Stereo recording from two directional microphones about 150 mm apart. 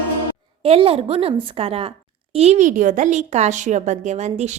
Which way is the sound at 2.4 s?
50° right (ahead or behind).